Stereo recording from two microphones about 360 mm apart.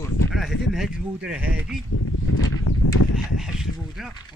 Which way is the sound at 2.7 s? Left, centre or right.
Left.